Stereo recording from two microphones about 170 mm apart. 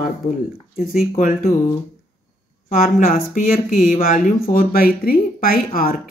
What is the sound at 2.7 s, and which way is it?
Speech, 50° left (ahead or behind).